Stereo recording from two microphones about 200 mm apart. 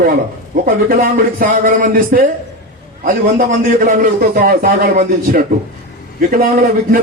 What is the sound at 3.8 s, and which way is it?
A man's voice, 45° right (ahead or behind).